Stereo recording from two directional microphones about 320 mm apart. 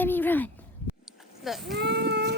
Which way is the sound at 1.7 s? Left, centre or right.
Right.